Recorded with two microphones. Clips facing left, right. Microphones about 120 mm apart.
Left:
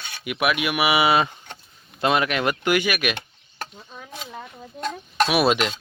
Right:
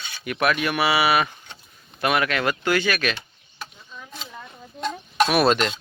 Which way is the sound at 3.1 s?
55° left (ahead or behind).